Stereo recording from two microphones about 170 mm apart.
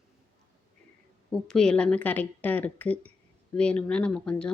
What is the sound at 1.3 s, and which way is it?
A woman's voice, 5° left (ahead or behind).